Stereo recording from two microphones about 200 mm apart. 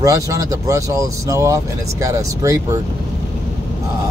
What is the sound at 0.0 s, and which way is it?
Speech, 15° right (ahead or behind).